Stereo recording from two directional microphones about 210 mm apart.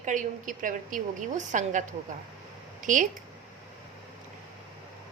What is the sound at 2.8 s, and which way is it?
Speech, 35° right (ahead or behind).